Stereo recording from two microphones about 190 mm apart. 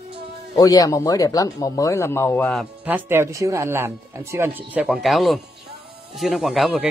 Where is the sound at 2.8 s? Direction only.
10° right (ahead or behind).